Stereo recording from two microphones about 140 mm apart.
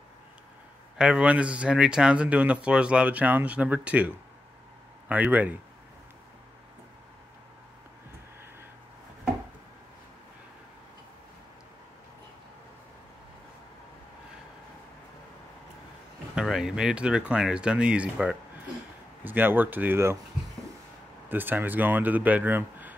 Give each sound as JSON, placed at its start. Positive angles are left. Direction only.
{"t": 0.9, "sound": "speech", "side_deg": -5}
{"t": 16.3, "sound": "speech", "side_deg": -5}
{"t": 21.3, "sound": "speech", "side_deg": -15}